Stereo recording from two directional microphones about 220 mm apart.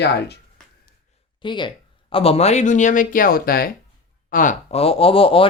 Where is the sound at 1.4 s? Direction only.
20° left (ahead or behind).